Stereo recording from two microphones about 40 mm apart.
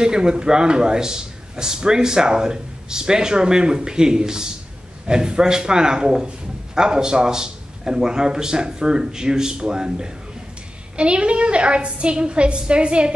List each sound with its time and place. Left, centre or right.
0.0 s a man's voice: centre